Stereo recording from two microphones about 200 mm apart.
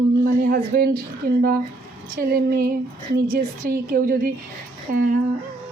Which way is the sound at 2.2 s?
45° right (ahead or behind).